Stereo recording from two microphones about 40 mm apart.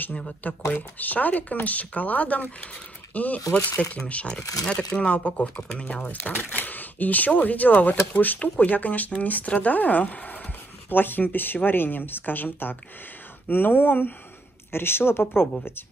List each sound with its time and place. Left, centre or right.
0.4 s speech: left
4.6 s speech: left
6.0 s speech: left
10.9 s speech: left
14.7 s a woman's voice: left